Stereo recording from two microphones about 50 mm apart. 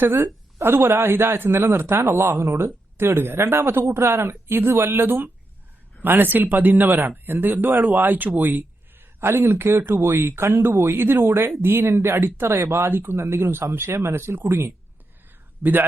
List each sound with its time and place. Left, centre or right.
0.6 s speech: right
8.4 s a sound: right
9.2 s speech: right
13.1 s speech: right